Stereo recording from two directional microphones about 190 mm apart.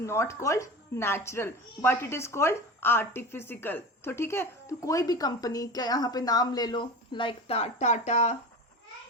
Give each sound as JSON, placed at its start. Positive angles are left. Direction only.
{"t": 0.0, "sound": "speech", "side_deg": 15}